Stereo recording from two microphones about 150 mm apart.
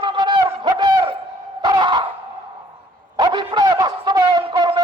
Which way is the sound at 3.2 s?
30° right (ahead or behind).